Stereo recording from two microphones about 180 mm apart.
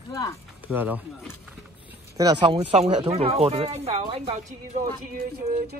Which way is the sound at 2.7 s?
35° right (ahead or behind).